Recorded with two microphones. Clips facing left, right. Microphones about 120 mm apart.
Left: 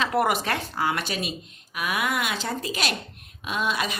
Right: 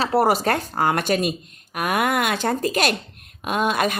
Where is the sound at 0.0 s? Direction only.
35° right (ahead or behind).